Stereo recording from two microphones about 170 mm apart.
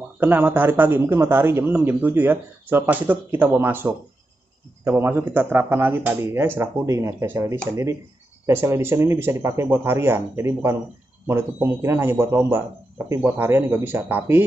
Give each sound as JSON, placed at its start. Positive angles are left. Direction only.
{"t": 0.2, "sound": "speech", "side_deg": -10}